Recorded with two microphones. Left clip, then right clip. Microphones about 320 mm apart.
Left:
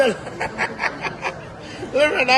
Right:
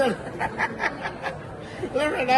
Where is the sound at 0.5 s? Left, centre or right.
Centre.